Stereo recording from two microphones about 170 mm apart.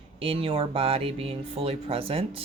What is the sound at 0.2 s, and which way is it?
Speech, 35° right (ahead or behind).